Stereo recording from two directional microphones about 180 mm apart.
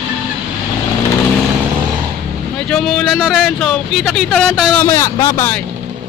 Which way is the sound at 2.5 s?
5° left (ahead or behind).